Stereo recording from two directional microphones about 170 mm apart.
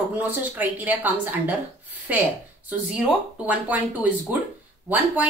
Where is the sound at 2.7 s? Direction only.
5° right (ahead or behind).